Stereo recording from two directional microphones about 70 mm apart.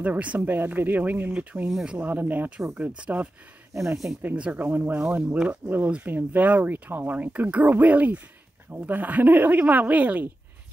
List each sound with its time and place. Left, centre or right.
0.0 s speech: right
3.7 s speech: centre
4.2 s speech: right